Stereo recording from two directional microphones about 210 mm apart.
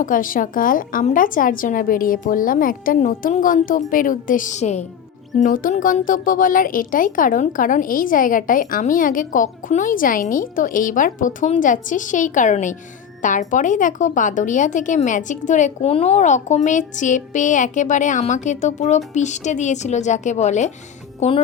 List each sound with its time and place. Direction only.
0.0 s a woman's voice: 40° left (ahead or behind)